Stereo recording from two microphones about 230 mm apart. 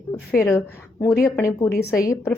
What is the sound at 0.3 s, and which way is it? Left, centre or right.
A woman's voice, centre.